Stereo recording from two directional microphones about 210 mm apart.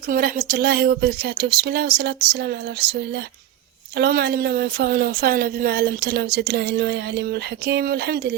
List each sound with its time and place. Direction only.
0.1 s speech: 40° right (ahead or behind)